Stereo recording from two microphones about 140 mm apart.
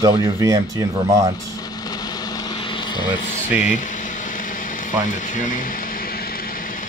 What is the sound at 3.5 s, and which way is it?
Speech, 10° right (ahead or behind).